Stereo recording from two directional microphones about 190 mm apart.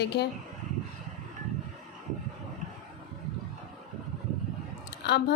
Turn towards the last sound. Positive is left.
turn(degrees=60)  # may be behind; listen again after turning